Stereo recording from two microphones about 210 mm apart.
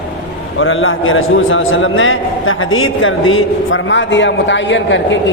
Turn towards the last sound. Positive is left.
turn(degrees=60)  # may be behind; listen again after turning